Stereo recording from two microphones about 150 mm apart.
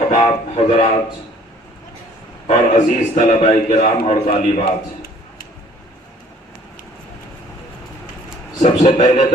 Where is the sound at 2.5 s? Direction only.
55° left (ahead or behind).